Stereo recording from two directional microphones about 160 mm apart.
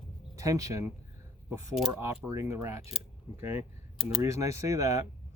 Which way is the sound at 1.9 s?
15° right (ahead or behind).